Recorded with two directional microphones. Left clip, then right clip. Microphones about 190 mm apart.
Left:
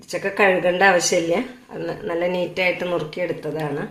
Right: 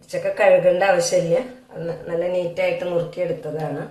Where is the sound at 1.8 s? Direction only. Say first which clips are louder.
Even; 50° left (ahead or behind).